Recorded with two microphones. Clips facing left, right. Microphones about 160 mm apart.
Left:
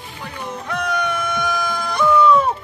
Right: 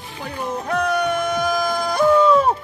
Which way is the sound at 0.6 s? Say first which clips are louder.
Right 3 dB; 40° right (ahead or behind).